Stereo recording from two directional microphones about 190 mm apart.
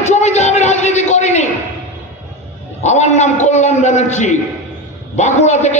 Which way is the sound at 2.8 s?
35° left (ahead or behind).